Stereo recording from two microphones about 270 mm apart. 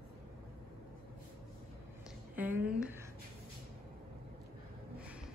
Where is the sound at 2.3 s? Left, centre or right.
Centre.